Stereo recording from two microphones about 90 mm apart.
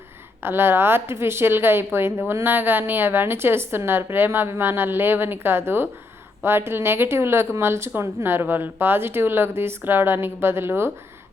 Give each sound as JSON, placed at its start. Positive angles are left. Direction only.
{"t": 0.4, "sound": "a woman's voice", "side_deg": -25}